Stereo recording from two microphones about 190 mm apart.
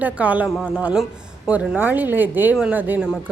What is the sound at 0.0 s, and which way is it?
A woman's voice, 10° right (ahead or behind).